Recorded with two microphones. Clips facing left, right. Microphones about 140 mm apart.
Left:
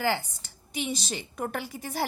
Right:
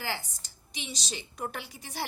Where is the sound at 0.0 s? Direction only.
55° left (ahead or behind).